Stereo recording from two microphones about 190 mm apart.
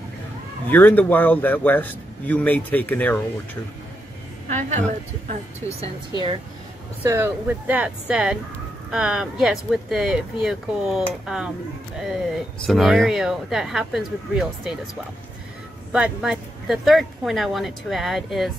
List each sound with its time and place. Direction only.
0.7 s speech: 10° left (ahead or behind)
4.5 s a woman's voice: 40° right (ahead or behind)
7.0 s speech: 10° right (ahead or behind)
12.6 s speech: centre (ahead or behind)
15.9 s speech: 5° right (ahead or behind)